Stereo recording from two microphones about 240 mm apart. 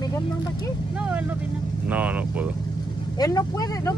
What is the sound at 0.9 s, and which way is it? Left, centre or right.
Speech, centre.